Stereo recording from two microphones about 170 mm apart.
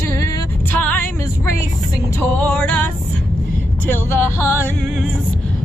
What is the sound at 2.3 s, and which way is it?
Music, 10° left (ahead or behind).